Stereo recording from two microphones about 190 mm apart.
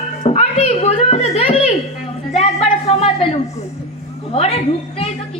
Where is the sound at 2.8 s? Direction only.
30° left (ahead or behind).